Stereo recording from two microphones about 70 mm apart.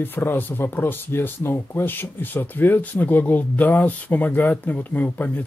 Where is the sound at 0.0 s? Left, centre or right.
Left.